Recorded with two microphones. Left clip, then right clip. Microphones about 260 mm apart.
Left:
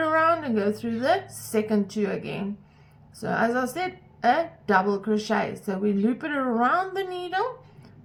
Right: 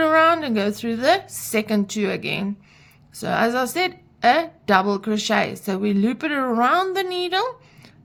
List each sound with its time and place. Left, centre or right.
0.0 s a sound: right
0.3 s a woman's voice: right
6.7 s speech: right
7.2 s speech: right